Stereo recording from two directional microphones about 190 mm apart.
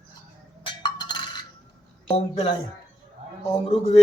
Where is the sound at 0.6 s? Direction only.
25° left (ahead or behind).